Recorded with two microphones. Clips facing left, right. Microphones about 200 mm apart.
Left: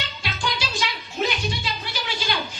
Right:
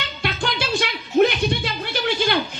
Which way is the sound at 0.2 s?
55° right (ahead or behind).